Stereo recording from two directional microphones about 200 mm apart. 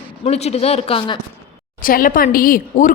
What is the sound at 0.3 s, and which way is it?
Speech, 30° left (ahead or behind).